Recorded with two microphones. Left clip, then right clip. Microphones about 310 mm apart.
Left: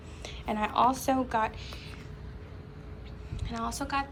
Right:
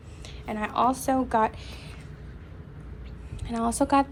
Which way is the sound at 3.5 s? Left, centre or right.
Centre.